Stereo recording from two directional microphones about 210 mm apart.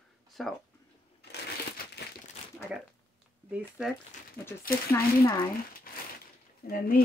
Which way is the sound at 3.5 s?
5° right (ahead or behind).